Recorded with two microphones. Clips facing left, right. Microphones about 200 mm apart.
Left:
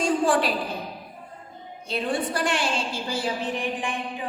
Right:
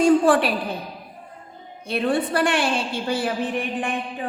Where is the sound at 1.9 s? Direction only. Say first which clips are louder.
Right 5 dB; 60° right (ahead or behind).